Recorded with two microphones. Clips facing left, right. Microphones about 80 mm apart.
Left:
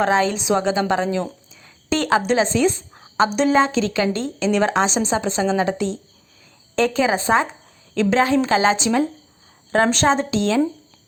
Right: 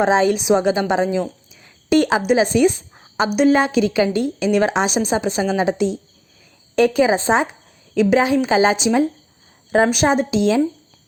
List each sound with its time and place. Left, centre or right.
0.0 s a woman's voice: centre